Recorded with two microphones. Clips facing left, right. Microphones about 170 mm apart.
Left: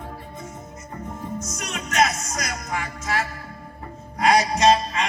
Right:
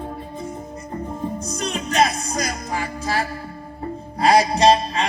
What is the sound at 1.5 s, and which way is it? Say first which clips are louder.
Music: right 6 dB; 30° right (ahead or behind).